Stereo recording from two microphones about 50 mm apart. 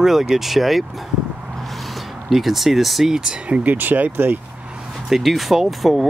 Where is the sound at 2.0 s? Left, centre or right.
Centre.